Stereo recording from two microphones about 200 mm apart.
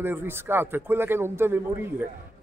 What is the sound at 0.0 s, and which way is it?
A man's voice, 10° right (ahead or behind).